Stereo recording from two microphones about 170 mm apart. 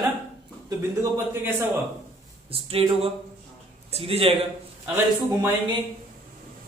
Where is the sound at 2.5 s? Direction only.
35° right (ahead or behind).